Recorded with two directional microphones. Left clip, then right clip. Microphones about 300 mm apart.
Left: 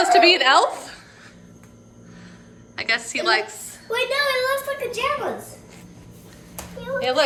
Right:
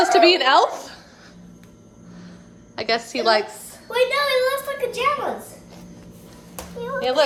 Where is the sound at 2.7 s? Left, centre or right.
Centre.